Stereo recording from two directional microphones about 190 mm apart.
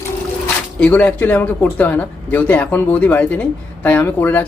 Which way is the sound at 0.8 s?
10° left (ahead or behind).